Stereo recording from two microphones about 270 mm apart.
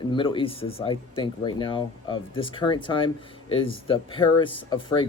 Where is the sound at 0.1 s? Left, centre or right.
Centre.